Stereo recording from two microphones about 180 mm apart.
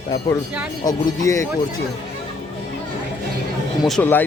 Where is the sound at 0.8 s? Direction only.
20° left (ahead or behind).